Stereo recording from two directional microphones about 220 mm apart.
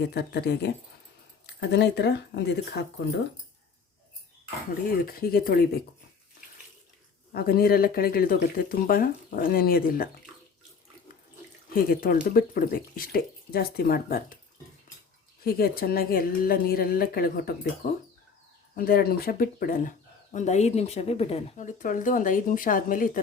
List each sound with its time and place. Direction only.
0.0 s a woman's voice: 45° left (ahead or behind)
5.0 s a woman's voice: 45° left (ahead or behind)
7.3 s speech: 45° left (ahead or behind)
11.7 s speech: 40° left (ahead or behind)
15.4 s a woman's voice: 45° left (ahead or behind)
18.8 s speech: 45° left (ahead or behind)